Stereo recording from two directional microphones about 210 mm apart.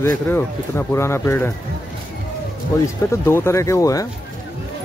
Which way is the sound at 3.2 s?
10° left (ahead or behind).